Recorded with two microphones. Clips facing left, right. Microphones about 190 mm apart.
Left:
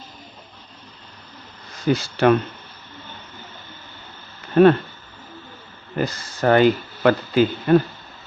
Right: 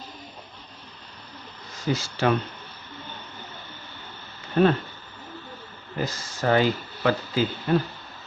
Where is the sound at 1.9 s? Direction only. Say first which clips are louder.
Left 7 dB; 60° left (ahead or behind).